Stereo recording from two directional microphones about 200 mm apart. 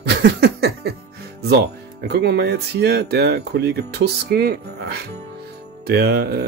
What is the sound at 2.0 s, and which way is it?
Speech, 55° right (ahead or behind).